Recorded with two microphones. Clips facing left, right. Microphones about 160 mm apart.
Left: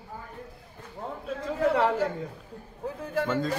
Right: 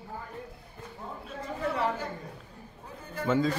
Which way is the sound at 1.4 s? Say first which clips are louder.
Left 6 dB; 90° left.